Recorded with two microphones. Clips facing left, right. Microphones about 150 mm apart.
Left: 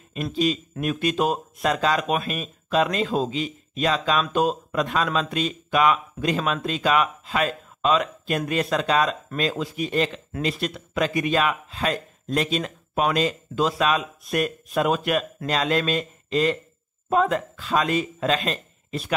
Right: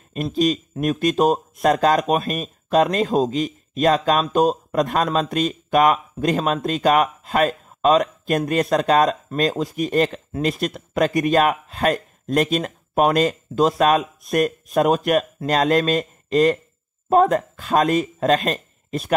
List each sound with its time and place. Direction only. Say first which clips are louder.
0.1 s speech: right 4 dB; 45° right (ahead or behind)